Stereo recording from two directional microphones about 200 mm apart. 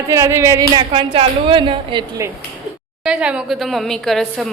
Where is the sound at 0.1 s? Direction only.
15° right (ahead or behind).